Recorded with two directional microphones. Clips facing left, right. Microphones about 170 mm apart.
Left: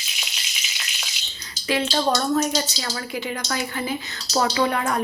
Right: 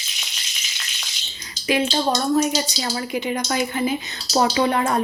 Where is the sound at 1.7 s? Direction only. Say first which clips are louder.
Right 1 dB; 10° right (ahead or behind).